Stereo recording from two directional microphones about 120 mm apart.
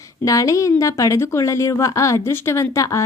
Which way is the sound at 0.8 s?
25° left (ahead or behind).